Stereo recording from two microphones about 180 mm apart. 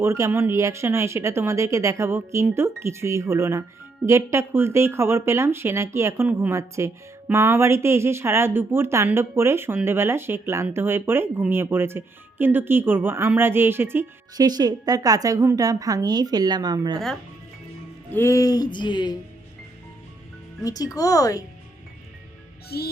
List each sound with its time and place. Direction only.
0.0 s speech: 15° right (ahead or behind)
18.1 s speech: 15° left (ahead or behind)
20.7 s speech: 20° left (ahead or behind)
22.7 s music: 60° left (ahead or behind)